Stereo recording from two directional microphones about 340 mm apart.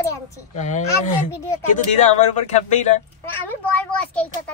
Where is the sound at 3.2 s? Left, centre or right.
Centre.